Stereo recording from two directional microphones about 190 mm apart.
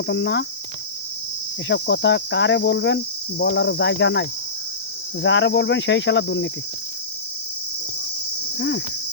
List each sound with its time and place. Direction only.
0.1 s cricket: 65° left (ahead or behind)
1.6 s cricket: 70° left (ahead or behind)
8.5 s cricket: 70° left (ahead or behind)